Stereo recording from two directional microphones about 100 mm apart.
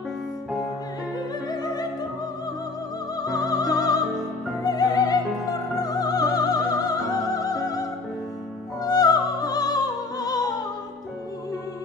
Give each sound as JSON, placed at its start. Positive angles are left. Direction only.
{"t": 1.6, "sound": "music", "side_deg": 40}
{"t": 3.2, "sound": "music", "side_deg": 40}
{"t": 8.8, "sound": "music", "side_deg": 40}